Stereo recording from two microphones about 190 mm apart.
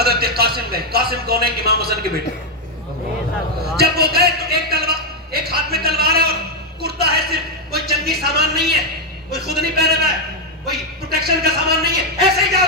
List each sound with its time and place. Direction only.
0.0 s a man's voice: 55° right (ahead or behind)
3.8 s a sound: 55° right (ahead or behind)
9.3 s a man's voice: 55° right (ahead or behind)